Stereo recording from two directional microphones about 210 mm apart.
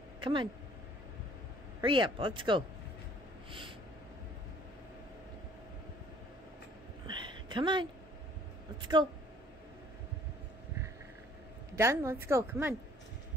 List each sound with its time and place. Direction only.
0.2 s speech: 25° right (ahead or behind)
1.8 s speech: 25° right (ahead or behind)
7.1 s a sound: 20° right (ahead or behind)
11.7 s a woman's voice: 10° right (ahead or behind)